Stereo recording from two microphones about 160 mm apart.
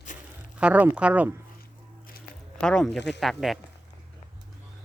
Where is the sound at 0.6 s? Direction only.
10° right (ahead or behind).